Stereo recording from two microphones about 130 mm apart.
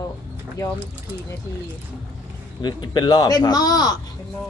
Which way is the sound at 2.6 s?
35° left (ahead or behind).